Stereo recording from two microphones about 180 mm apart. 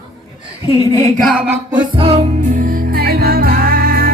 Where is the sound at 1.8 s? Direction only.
35° right (ahead or behind).